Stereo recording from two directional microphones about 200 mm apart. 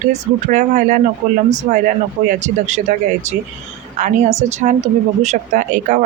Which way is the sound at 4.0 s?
35° right (ahead or behind).